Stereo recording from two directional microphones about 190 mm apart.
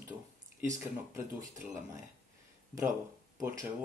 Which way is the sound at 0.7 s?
15° right (ahead or behind).